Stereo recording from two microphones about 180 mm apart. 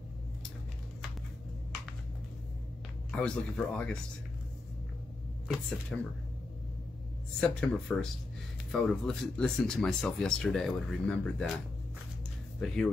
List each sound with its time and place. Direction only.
3.1 s speech: 5° left (ahead or behind)
5.9 s speech: 5° left (ahead or behind)
7.3 s speech: 5° left (ahead or behind)
12.5 s speech: 5° left (ahead or behind)